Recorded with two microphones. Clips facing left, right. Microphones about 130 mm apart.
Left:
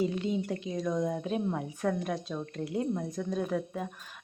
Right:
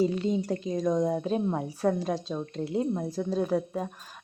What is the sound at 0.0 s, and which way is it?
A woman's voice, 35° right (ahead or behind).